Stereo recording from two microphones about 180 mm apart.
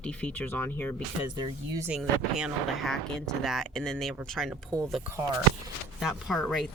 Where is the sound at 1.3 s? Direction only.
25° right (ahead or behind).